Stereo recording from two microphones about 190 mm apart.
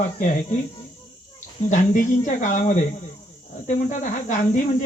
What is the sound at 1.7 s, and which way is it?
Speech, 40° left (ahead or behind).